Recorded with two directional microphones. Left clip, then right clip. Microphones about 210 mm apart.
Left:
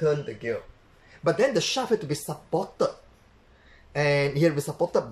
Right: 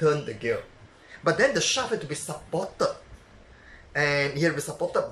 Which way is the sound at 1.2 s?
10° left (ahead or behind).